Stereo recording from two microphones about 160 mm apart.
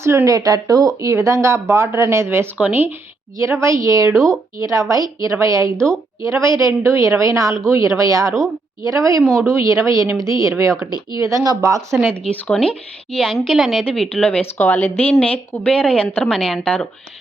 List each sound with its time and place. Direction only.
0.0 s a woman's voice: 15° right (ahead or behind)
12.5 s speech: 5° left (ahead or behind)